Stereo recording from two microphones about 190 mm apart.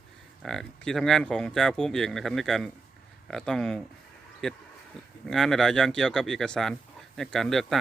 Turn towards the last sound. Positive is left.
turn(degrees=0)  # may be behind; listen again after turning